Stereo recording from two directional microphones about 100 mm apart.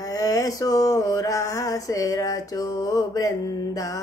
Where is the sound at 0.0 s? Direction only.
35° left (ahead or behind).